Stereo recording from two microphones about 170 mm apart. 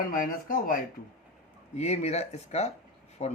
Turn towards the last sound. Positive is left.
turn(degrees=40)  # may be behind; listen again after turning